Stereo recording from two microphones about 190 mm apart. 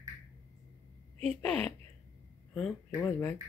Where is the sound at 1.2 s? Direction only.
35° right (ahead or behind).